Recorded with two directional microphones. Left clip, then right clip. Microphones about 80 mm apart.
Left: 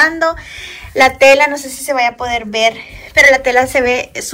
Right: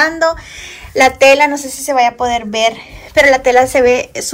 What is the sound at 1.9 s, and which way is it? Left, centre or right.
A woman's voice, right.